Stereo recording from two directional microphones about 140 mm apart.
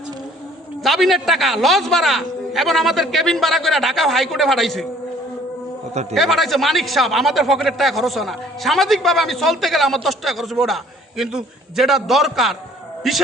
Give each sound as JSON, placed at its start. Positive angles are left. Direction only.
{"t": 0.8, "sound": "a man's voice", "side_deg": 0}
{"t": 5.9, "sound": "a man's voice", "side_deg": -50}
{"t": 6.1, "sound": "a man's voice", "side_deg": 0}